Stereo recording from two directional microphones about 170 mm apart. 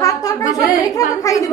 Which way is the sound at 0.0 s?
20° left (ahead or behind).